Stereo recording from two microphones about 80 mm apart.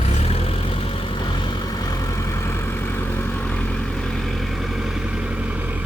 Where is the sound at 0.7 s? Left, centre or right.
Left.